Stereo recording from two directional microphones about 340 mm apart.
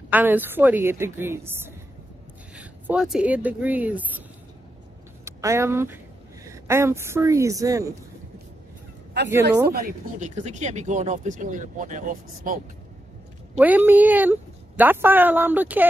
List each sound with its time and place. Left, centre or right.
0.1 s a woman's voice: centre
5.2 s a woman's voice: centre
9.8 s speech: right
13.6 s a woman's voice: centre